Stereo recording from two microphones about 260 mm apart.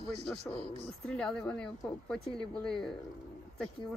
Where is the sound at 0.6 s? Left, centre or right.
Right.